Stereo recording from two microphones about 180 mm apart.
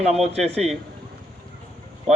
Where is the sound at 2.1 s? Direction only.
Centre (ahead or behind).